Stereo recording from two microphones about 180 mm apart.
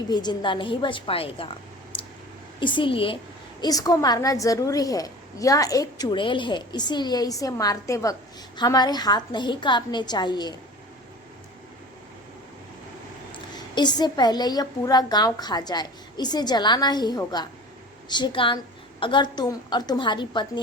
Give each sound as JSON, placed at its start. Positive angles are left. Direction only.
{"t": 0.1, "sound": "a woman's voice", "side_deg": 25}
{"t": 2.6, "sound": "a woman's voice", "side_deg": 25}
{"t": 13.6, "sound": "a woman's voice", "side_deg": 25}